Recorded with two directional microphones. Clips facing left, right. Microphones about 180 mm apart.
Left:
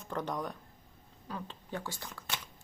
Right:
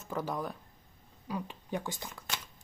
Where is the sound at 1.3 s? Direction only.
15° right (ahead or behind).